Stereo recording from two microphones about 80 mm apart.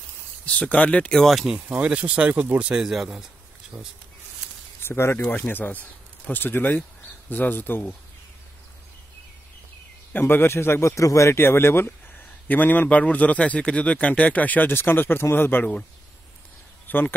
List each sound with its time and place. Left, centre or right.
0.5 s speech: centre
1.2 s speech: centre
1.5 s speech: centre
2.7 s speech: centre
4.8 s a man's voice: left
10.1 s a man's voice: left
16.8 s a sound: left